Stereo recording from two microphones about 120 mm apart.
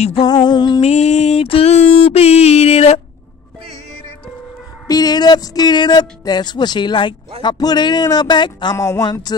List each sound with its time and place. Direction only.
0.2 s speech: 40° left (ahead or behind)
0.7 s a sound: 65° left (ahead or behind)
4.8 s speech: 30° left (ahead or behind)
8.7 s speech: 25° left (ahead or behind)